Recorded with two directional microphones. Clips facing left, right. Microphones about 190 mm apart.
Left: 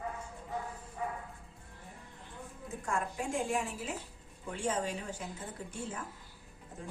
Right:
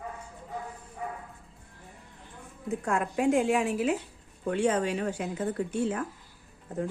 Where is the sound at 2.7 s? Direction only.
70° right (ahead or behind).